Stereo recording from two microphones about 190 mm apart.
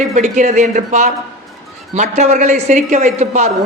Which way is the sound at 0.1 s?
40° right (ahead or behind).